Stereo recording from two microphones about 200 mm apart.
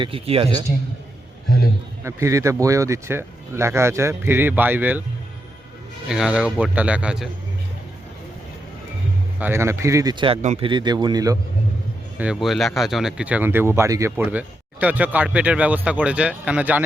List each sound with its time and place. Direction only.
0.0 s a man's voice: 25° right (ahead or behind)
2.0 s speech: 15° right (ahead or behind)
6.1 s a man's voice: 5° right (ahead or behind)
9.4 s a man's voice: 10° right (ahead or behind)
12.2 s speech: centre (ahead or behind)